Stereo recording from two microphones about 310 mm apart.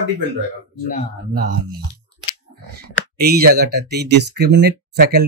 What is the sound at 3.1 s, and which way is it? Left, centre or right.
Speech, right.